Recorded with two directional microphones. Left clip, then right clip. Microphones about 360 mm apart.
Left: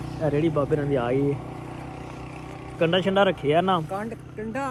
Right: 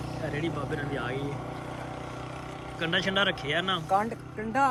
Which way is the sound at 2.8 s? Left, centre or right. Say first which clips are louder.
Left 6 dB; centre.